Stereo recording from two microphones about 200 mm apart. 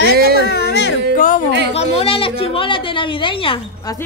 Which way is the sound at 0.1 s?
50° right (ahead or behind).